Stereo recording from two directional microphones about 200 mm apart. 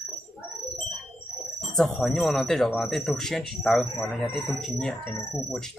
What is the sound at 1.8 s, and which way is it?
Speech, centre (ahead or behind).